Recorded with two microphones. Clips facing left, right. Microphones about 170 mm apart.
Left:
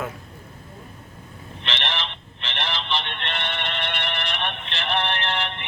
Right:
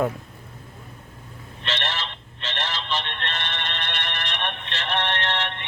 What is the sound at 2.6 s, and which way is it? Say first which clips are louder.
Music: left 1 dB; 15° left (ahead or behind).